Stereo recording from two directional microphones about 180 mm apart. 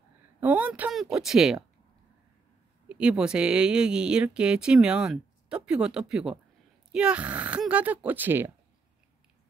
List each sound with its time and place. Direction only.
0.4 s speech: 10° right (ahead or behind)
2.9 s speech: 5° right (ahead or behind)